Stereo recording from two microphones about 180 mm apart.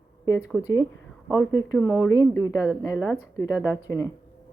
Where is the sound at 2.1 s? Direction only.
20° left (ahead or behind).